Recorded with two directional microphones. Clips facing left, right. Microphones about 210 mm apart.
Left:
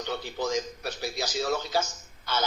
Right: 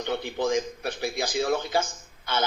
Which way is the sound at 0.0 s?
55° right (ahead or behind).